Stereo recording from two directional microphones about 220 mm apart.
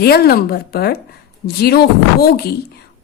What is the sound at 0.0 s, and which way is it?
A woman's voice, 45° left (ahead or behind).